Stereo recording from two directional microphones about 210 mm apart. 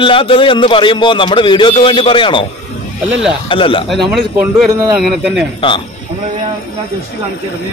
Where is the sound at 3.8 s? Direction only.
Centre (ahead or behind).